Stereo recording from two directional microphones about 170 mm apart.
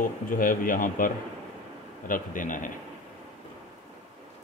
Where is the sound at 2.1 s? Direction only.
50° left (ahead or behind).